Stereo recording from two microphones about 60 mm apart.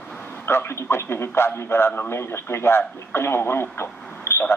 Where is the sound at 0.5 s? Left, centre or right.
Left.